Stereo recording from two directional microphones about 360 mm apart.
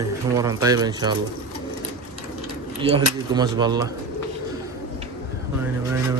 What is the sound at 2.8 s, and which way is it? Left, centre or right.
Speech, centre.